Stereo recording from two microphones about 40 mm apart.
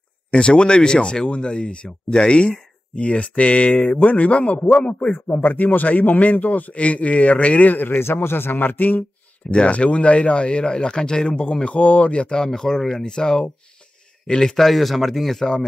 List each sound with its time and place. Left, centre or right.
0.3 s speech: left
5.3 s a man's voice: left
7.9 s speech: left
9.5 s speech: left; by 15.4 s centre